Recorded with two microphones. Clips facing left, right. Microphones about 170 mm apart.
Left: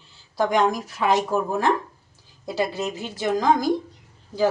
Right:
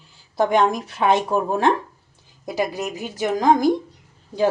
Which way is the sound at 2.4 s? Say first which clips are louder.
Right 1 dB; 15° right (ahead or behind).